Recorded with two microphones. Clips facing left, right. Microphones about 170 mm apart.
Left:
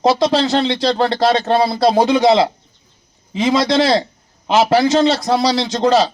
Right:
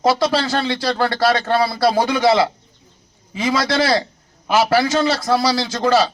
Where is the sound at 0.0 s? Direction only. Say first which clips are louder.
Left 3 dB; 25° left (ahead or behind).